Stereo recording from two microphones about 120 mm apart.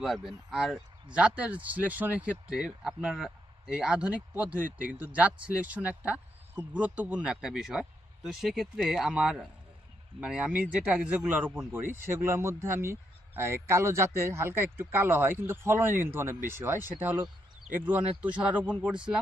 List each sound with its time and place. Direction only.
0.0 s speech: centre (ahead or behind)